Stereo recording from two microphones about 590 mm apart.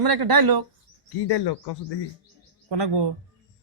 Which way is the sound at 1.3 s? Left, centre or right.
Left.